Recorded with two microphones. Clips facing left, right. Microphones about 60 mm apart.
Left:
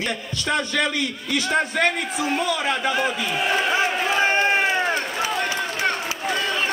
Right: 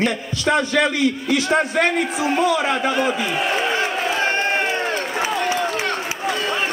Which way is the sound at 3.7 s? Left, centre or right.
Centre.